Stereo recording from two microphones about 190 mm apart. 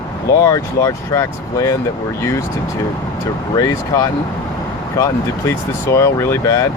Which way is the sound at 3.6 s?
20° left (ahead or behind).